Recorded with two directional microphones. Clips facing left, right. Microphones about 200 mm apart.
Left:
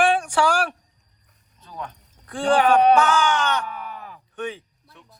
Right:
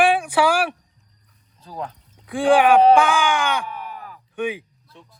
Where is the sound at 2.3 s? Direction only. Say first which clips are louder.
Right 3 dB; 10° right (ahead or behind).